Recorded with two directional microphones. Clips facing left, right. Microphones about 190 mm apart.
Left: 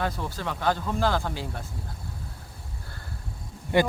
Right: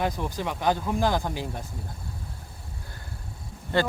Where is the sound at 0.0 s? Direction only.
15° right (ahead or behind).